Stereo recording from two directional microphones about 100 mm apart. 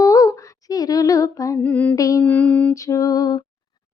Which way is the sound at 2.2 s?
15° left (ahead or behind).